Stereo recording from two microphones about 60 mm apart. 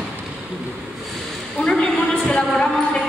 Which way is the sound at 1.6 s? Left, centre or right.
Centre.